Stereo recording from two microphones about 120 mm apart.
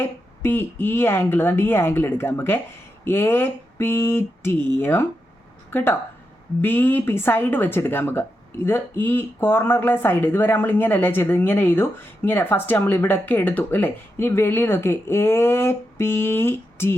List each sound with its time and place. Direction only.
0.0 s speech: 20° left (ahead or behind)